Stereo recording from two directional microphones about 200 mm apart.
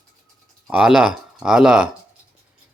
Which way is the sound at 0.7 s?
5° right (ahead or behind).